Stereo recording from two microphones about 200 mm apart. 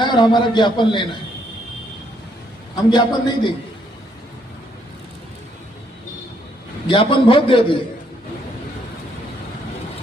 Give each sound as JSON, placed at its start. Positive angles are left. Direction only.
{"t": 0.0, "sound": "a man's voice", "side_deg": 20}
{"t": 2.7, "sound": "a man's voice", "side_deg": 20}
{"t": 6.8, "sound": "a man's voice", "side_deg": 25}